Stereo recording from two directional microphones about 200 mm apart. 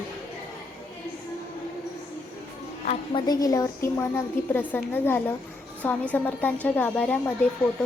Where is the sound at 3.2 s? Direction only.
15° left (ahead or behind).